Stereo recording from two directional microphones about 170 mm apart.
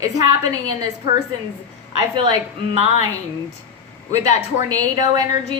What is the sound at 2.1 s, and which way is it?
Speech, 25° right (ahead or behind).